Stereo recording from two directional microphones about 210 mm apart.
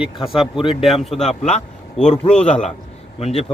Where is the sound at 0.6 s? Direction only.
25° left (ahead or behind).